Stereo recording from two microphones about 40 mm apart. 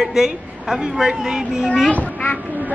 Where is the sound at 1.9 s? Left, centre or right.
Left.